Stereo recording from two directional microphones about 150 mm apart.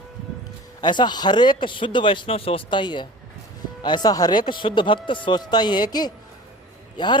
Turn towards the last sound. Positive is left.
turn(degrees=30)  # may be behind; listen again after turning